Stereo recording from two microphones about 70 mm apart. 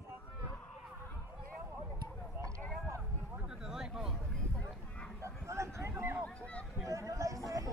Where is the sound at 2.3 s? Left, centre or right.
Right.